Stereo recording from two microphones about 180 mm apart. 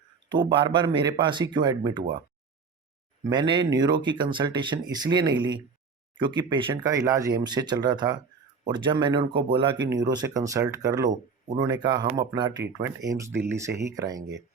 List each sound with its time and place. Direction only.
0.3 s speech: 25° right (ahead or behind)
3.2 s speech: 25° right (ahead or behind)